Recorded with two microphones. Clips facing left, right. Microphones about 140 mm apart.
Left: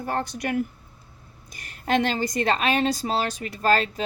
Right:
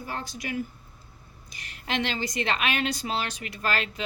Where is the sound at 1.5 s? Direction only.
45° left (ahead or behind).